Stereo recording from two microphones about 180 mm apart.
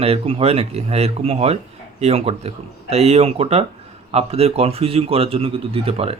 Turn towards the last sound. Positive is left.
turn(degrees=-35)  # may be behind; listen again after turning